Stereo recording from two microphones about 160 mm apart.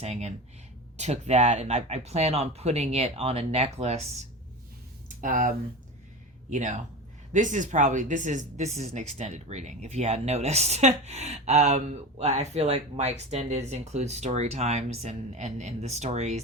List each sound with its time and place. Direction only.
0.0 s speech: 40° right (ahead or behind)
5.0 s speech: 55° right (ahead or behind)